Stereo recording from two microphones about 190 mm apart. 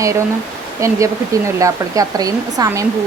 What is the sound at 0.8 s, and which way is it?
Speech, 15° right (ahead or behind).